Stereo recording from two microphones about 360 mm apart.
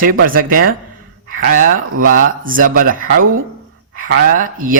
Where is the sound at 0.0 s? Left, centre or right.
Right.